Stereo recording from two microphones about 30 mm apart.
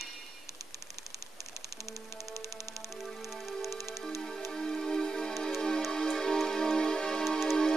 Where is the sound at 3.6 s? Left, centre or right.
Centre.